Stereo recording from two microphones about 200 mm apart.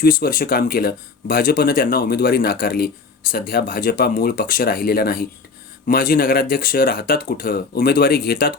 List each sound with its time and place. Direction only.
0.0 s speech: 45° left (ahead or behind)